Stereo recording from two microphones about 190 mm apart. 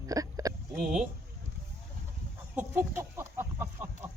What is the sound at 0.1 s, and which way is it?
Hiccup, 20° right (ahead or behind).